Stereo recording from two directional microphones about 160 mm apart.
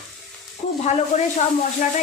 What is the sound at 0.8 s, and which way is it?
Speech, 45° left (ahead or behind).